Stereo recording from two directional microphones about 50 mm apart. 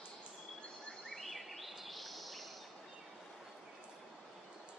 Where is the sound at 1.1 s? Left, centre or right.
Centre.